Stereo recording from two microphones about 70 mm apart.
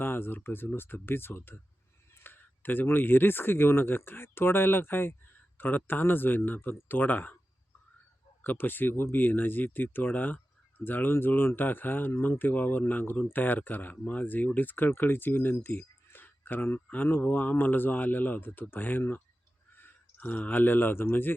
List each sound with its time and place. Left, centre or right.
0.0 s speech: left
8.4 s speech: left